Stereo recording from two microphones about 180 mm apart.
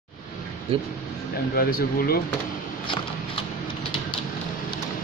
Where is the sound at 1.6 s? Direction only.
55° left (ahead or behind).